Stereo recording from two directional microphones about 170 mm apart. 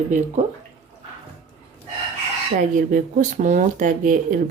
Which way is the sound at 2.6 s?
50° right (ahead or behind).